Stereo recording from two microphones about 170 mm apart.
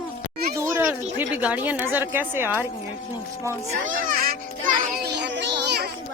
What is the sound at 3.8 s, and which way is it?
Music, 50° right (ahead or behind).